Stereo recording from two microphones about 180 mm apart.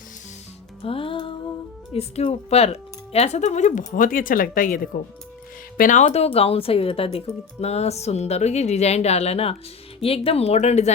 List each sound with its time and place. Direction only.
0.8 s music: 30° left (ahead or behind)
1.9 s speech: 35° left (ahead or behind)